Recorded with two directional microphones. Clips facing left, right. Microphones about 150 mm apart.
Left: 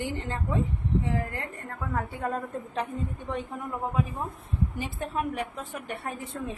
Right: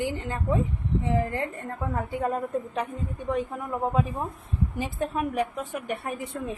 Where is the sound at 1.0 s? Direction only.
20° right (ahead or behind).